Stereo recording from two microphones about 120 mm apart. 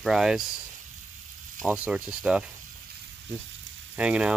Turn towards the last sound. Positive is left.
turn(degrees=-10)  # may be behind; listen again after turning